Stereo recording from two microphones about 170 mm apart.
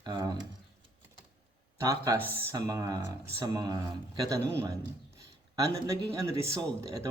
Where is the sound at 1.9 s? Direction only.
20° right (ahead or behind).